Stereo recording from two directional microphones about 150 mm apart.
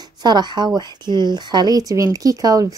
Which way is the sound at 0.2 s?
30° right (ahead or behind).